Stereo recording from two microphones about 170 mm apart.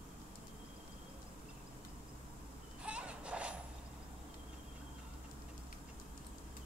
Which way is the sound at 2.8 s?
5° right (ahead or behind).